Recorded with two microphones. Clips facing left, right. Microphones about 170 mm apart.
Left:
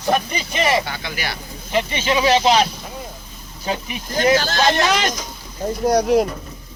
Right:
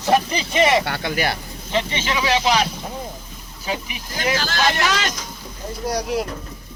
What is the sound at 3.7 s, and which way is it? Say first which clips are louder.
Speech: left 3 dB; 35° left (ahead or behind).